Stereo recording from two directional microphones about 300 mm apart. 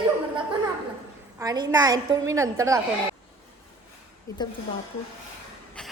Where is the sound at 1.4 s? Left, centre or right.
Centre.